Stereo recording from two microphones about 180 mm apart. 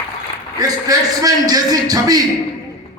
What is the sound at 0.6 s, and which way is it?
A man's voice, 20° right (ahead or behind).